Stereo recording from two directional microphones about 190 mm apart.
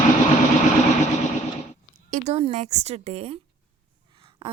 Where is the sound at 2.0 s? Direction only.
35° right (ahead or behind).